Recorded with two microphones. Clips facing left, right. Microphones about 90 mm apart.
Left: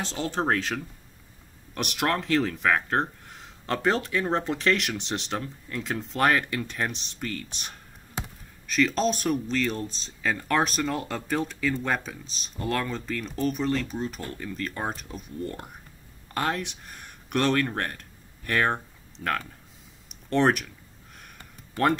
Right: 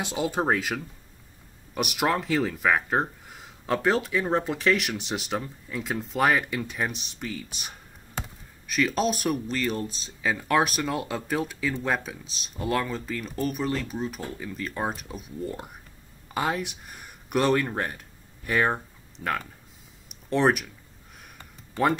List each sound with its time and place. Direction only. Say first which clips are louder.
0.0 s speech: right 2 dB; 10° right (ahead or behind)